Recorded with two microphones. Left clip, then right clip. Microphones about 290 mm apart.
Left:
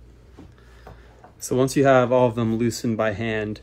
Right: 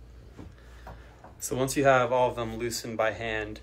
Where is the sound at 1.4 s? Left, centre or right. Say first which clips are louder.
Left 6 dB; centre.